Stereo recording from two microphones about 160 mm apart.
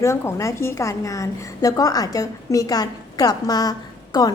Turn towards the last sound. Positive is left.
turn(degrees=25)  # may be behind; listen again after turning